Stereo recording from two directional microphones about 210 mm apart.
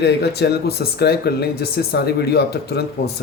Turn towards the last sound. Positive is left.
turn(degrees=50)  # may be behind; listen again after turning